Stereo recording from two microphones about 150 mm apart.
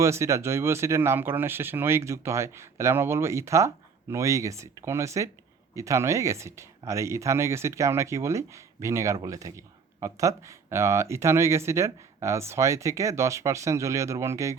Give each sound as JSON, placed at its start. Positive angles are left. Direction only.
{"t": 0.0, "sound": "speech", "side_deg": -20}